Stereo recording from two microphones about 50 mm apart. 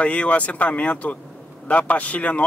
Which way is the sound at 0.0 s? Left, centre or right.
Left.